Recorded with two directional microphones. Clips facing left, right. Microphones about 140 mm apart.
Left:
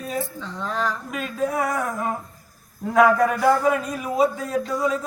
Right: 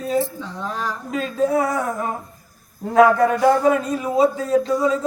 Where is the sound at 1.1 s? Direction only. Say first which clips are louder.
Right 9 dB; 30° right (ahead or behind).